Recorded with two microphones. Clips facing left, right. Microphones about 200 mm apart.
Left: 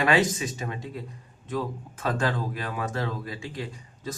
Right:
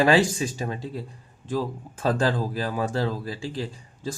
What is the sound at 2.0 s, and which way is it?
Speech, 30° right (ahead or behind).